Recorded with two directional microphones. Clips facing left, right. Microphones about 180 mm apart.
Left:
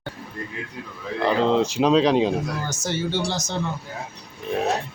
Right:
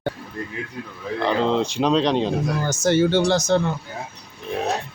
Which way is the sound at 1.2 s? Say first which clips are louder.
Left 1 dB; centre (ahead or behind).